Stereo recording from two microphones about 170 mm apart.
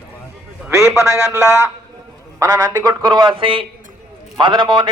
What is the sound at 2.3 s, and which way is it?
A man's voice, 20° right (ahead or behind).